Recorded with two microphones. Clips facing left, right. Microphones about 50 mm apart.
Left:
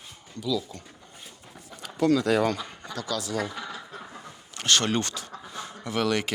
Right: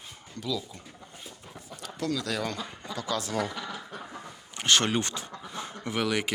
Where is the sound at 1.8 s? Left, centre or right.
Left.